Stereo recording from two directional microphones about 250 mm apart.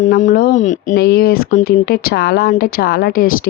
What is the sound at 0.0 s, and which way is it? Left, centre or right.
Speech, left.